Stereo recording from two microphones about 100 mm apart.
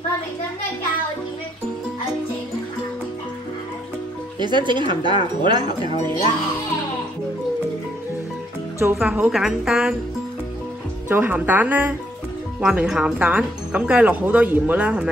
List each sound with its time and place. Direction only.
4.4 s speech: 50° right (ahead or behind)
8.9 s speech: 15° right (ahead or behind)
9.3 s a woman's voice: 5° right (ahead or behind)
11.1 s speech: 20° right (ahead or behind)